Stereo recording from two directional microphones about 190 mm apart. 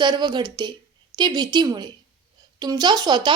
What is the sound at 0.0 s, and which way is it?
Speech, 25° right (ahead or behind).